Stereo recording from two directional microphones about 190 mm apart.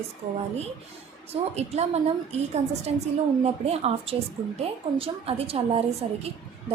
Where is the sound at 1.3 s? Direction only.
35° right (ahead or behind).